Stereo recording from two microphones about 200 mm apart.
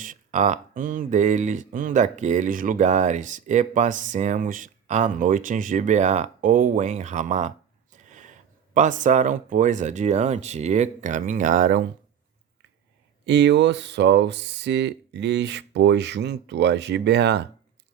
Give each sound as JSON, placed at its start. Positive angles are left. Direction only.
{"t": 0.0, "sound": "speech", "side_deg": -40}
{"t": 7.9, "sound": "a sound", "side_deg": -40}
{"t": 8.7, "sound": "speech", "side_deg": -40}
{"t": 13.2, "sound": "speech", "side_deg": -60}